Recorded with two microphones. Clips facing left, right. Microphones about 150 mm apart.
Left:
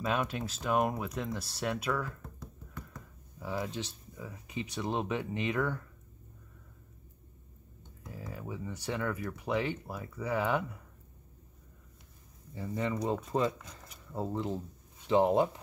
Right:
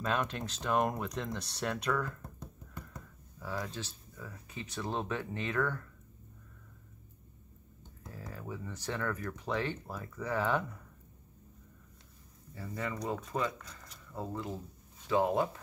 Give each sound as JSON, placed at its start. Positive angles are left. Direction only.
{"t": 0.0, "sound": "speech", "side_deg": 10}
{"t": 3.3, "sound": "speech", "side_deg": 15}
{"t": 8.3, "sound": "speech", "side_deg": 10}
{"t": 12.5, "sound": "speech", "side_deg": 20}